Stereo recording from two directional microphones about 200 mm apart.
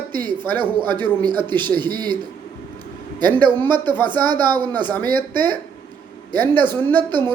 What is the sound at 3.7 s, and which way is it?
A man's voice, 20° right (ahead or behind).